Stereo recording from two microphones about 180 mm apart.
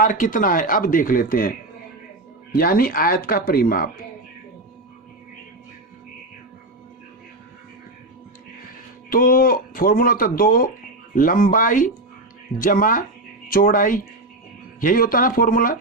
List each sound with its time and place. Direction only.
0.0 s speech: 50° left (ahead or behind)
9.0 s speech: 50° left (ahead or behind)